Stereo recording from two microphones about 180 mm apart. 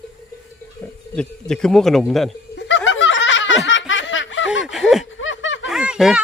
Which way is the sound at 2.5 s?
90° left.